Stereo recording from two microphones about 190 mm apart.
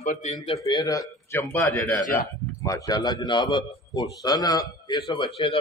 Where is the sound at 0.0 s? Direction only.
35° left (ahead or behind).